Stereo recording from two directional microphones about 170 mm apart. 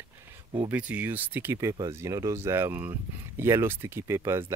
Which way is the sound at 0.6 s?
10° right (ahead or behind).